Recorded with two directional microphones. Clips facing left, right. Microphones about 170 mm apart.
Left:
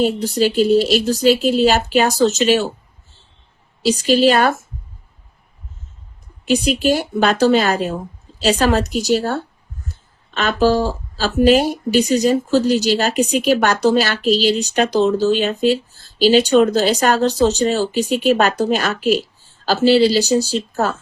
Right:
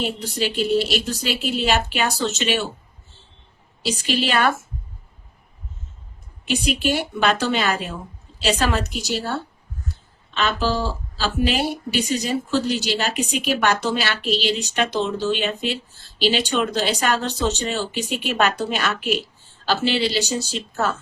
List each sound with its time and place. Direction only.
0.0 s speech: 40° left (ahead or behind)
3.8 s speech: 40° left (ahead or behind)
6.4 s speech: 40° left (ahead or behind)